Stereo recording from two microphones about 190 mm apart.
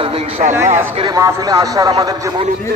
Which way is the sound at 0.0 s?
35° right (ahead or behind).